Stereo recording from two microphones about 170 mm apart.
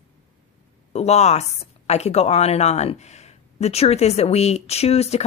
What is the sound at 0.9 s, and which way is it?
Speech, 40° left (ahead or behind).